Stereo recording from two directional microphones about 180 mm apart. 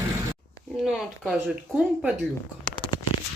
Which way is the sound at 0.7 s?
Centre (ahead or behind).